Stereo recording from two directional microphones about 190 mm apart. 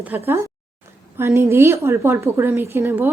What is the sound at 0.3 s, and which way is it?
A woman's voice, 15° right (ahead or behind).